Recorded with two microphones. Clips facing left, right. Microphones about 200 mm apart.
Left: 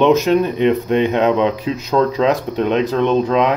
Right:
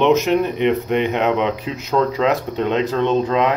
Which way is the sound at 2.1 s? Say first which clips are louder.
Left 2 dB; 15° left (ahead or behind).